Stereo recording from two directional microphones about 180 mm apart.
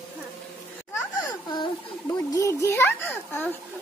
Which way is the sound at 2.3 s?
15° left (ahead or behind).